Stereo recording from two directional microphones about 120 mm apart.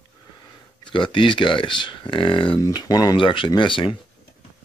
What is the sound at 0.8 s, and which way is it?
Speech, 45° left (ahead or behind).